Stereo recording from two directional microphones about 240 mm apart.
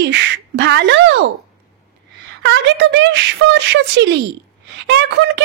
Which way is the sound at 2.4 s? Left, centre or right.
Right.